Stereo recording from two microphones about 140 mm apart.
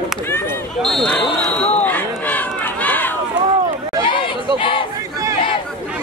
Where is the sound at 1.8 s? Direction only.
10° left (ahead or behind).